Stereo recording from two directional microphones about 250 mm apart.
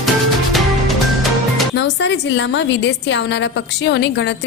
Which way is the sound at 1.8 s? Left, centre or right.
Left.